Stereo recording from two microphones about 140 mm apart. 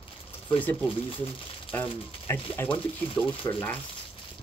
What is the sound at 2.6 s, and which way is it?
Speech, 15° left (ahead or behind).